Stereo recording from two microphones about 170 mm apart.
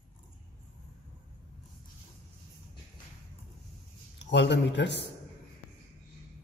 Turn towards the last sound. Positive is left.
turn(degrees=90)